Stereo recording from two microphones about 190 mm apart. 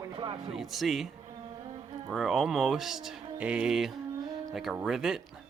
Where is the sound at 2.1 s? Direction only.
Centre (ahead or behind).